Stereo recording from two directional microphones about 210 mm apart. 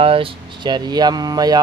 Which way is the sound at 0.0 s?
25° right (ahead or behind).